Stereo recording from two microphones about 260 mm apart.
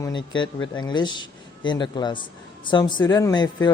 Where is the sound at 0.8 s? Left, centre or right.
Centre.